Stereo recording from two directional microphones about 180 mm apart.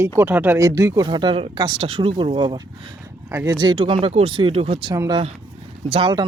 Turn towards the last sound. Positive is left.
turn(degrees=-25)  # may be behind; listen again after turning